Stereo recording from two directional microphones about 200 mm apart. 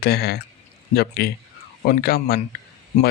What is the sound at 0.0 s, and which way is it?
Speech, 55° left (ahead or behind).